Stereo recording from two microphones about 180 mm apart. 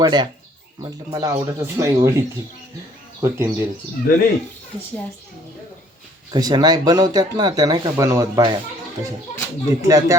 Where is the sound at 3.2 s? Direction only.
15° right (ahead or behind).